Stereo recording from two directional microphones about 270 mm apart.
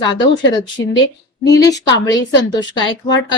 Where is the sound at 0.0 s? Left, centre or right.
Centre.